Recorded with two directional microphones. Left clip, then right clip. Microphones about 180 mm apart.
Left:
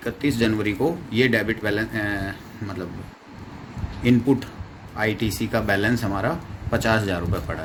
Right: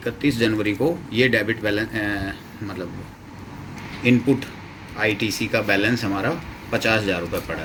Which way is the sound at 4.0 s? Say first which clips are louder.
Right 1 dB; 80° left.